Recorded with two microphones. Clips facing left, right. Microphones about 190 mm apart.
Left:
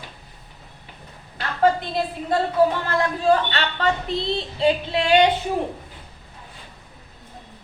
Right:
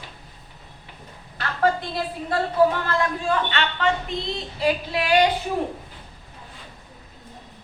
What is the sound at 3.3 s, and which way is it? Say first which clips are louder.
Speech: left 4 dB; 35° left (ahead or behind).